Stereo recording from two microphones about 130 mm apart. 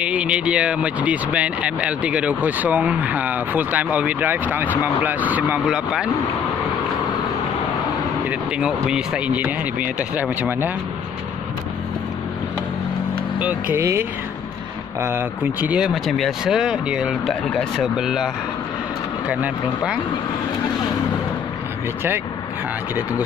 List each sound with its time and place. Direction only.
0.0 s speech: 10° right (ahead or behind)
8.3 s speech: 5° right (ahead or behind)
13.4 s speech: 15° right (ahead or behind)